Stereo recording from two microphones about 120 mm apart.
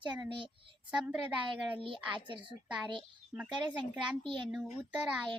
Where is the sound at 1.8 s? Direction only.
45° right (ahead or behind).